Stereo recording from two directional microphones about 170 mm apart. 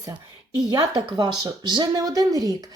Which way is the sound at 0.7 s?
25° right (ahead or behind).